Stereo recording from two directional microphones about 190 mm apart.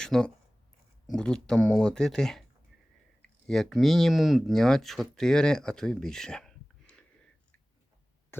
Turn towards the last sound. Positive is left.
turn(degrees=5)  # may be behind; listen again after turning